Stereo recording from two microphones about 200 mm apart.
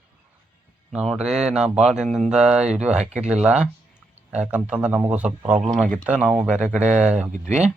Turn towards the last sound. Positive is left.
turn(degrees=-35)  # may be behind; listen again after turning